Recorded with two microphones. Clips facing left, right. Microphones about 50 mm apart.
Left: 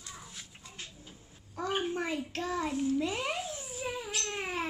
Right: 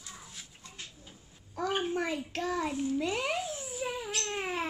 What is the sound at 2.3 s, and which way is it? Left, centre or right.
Child singing, right.